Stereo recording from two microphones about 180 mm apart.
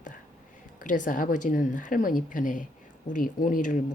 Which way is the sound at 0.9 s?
45° left (ahead or behind).